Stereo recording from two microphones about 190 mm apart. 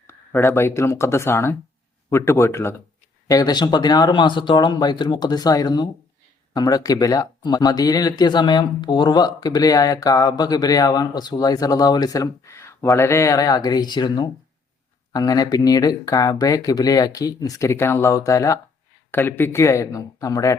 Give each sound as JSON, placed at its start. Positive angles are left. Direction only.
{"t": 0.1, "sound": "speech", "side_deg": 15}